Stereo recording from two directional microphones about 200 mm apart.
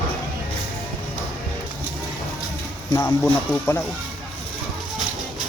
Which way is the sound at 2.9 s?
5° left (ahead or behind).